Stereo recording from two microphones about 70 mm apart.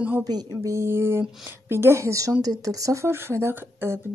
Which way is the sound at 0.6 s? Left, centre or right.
Right.